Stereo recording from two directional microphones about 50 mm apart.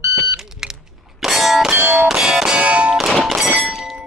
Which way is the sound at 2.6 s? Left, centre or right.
Right.